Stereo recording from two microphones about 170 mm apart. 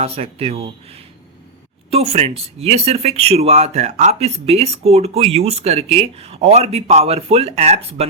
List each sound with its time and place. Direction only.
0.0 s speech: 35° right (ahead or behind)